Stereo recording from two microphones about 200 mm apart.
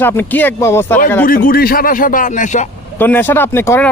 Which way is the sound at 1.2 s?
45° left (ahead or behind).